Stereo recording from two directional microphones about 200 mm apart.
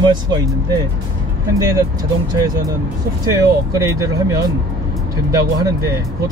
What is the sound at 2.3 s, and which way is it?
Speech, 15° right (ahead or behind).